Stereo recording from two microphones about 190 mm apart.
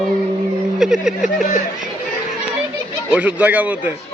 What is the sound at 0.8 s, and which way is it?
Speech, 5° right (ahead or behind).